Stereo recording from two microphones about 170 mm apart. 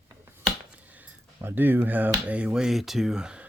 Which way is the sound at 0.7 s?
10° right (ahead or behind).